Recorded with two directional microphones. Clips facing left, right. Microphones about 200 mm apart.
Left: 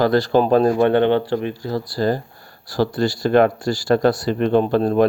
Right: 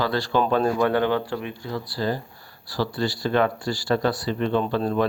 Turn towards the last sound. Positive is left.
turn(degrees=50)  # may be behind; listen again after turning